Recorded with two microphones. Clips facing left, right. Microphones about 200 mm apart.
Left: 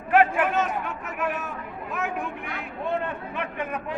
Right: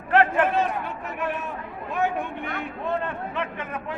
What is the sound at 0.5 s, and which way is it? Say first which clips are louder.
Chatter: right 1 dB; 35° right (ahead or behind).